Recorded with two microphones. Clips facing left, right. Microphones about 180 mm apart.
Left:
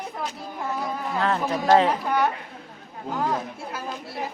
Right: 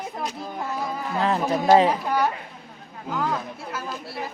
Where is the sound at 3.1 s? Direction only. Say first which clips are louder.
Even; 30° left (ahead or behind).